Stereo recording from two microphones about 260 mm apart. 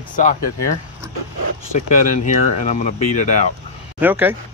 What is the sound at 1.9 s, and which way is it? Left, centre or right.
Speech, left.